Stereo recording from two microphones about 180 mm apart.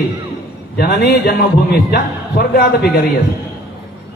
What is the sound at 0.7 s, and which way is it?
A man's voice, 60° left (ahead or behind).